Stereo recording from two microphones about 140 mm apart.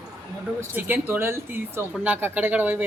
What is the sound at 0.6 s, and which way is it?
Speech, 15° right (ahead or behind).